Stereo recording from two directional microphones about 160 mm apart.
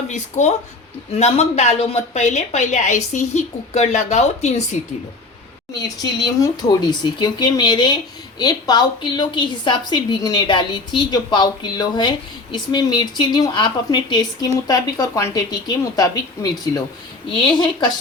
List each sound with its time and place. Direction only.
0.1 s a woman's voice: 45° left (ahead or behind)
6.0 s a woman's voice: 25° left (ahead or behind)